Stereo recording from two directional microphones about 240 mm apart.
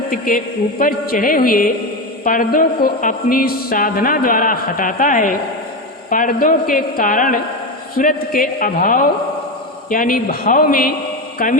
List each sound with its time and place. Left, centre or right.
0.1 s speech: left